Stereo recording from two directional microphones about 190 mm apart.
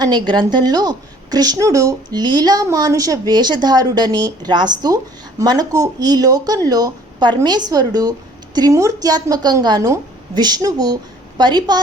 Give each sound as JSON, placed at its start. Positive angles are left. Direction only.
{"t": 0.0, "sound": "a woman's voice", "side_deg": -25}